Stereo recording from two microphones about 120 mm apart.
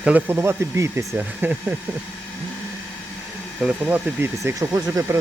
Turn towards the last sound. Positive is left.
turn(degrees=-30)  # may be behind; listen again after turning